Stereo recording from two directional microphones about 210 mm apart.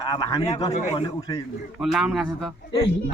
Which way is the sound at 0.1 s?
20° left (ahead or behind).